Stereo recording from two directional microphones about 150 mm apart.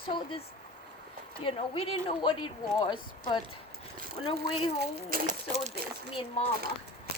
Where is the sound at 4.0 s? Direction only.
90° right.